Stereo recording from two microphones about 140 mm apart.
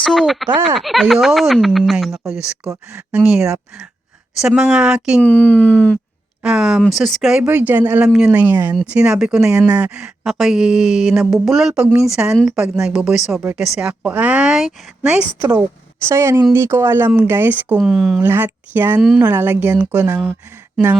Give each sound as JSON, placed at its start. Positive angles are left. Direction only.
{"t": 0.0, "sound": "speech", "side_deg": 0}
{"t": 5.2, "sound": "speech", "side_deg": 10}
{"t": 6.4, "sound": "speech", "side_deg": -5}
{"t": 8.7, "sound": "speech", "side_deg": -5}
{"t": 17.7, "sound": "speech", "side_deg": 0}
{"t": 18.2, "sound": "speech", "side_deg": -15}